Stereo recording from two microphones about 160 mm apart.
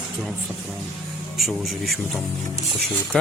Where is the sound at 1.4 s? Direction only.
Centre (ahead or behind).